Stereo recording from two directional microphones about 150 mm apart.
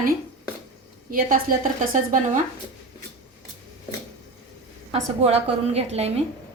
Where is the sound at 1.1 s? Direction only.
65° right (ahead or behind).